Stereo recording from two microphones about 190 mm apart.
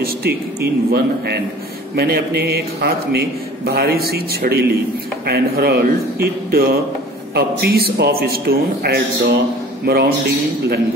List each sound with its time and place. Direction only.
0.0 s a man's voice: 55° right (ahead or behind)